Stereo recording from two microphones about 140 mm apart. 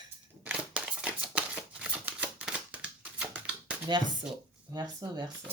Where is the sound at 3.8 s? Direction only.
35° right (ahead or behind).